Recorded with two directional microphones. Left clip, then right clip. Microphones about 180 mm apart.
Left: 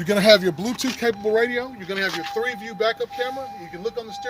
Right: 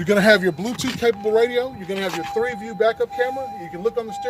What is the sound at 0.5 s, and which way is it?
Speech, 35° left (ahead or behind).